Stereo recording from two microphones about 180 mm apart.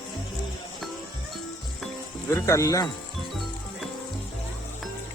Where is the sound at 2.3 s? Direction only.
15° left (ahead or behind).